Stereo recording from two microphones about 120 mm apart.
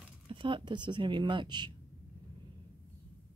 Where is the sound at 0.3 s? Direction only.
45° right (ahead or behind).